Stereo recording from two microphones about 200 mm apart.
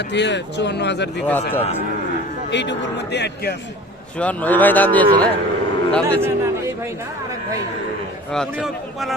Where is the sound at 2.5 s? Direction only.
60° left (ahead or behind).